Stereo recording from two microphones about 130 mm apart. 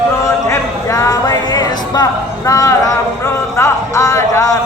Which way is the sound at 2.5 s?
25° left (ahead or behind).